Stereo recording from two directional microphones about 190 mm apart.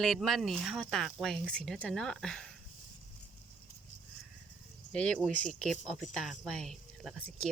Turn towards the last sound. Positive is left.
turn(degrees=0)  # may be behind; listen again after turning